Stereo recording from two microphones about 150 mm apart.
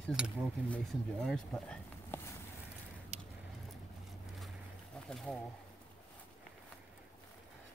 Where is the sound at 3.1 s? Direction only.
45° right (ahead or behind).